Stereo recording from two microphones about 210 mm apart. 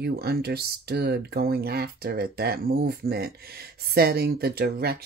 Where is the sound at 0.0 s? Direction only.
50° right (ahead or behind).